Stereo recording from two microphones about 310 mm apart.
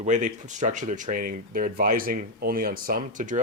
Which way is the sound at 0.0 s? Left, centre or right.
Right.